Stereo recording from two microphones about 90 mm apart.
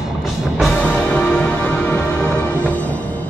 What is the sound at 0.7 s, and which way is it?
Music, 10° left (ahead or behind).